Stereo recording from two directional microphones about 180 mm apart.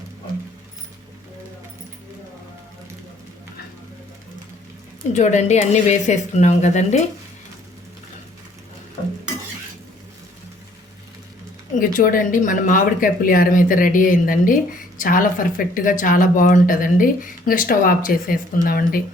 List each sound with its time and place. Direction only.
5.1 s speech: 40° left (ahead or behind)
11.8 s speech: 50° left (ahead or behind)